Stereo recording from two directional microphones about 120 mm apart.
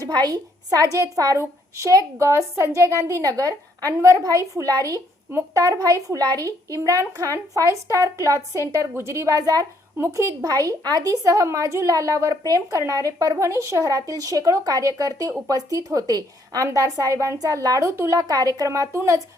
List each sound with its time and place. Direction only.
0.0 s a woman's voice: 35° right (ahead or behind)